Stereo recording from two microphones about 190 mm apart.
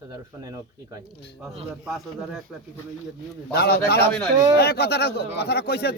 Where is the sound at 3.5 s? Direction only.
60° left (ahead or behind).